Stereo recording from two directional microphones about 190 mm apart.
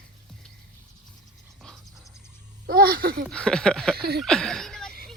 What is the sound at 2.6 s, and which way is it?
Speech, 55° right (ahead or behind).